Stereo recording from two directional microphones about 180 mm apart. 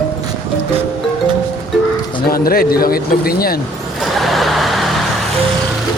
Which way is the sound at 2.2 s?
55° left (ahead or behind).